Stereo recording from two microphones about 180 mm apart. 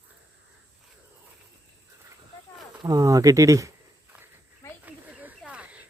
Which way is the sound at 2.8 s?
20° right (ahead or behind).